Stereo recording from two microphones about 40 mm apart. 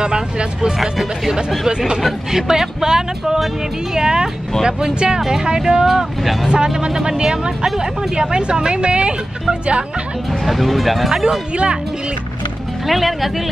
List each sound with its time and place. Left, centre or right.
0.0 s speech: right
0.7 s speech: centre
2.3 s speech: centre
6.5 s speech: right
10.4 s speech: centre
11.1 s speech: centre
11.5 s speech: right
12.8 s speech: centre